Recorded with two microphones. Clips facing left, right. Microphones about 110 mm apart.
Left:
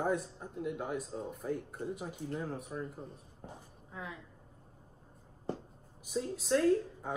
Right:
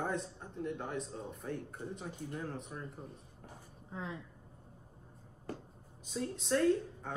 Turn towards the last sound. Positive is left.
turn(degrees=5)  # may be behind; listen again after turning